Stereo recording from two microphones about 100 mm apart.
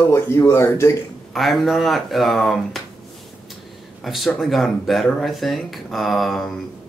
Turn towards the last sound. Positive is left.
turn(degrees=0)  # may be behind; listen again after turning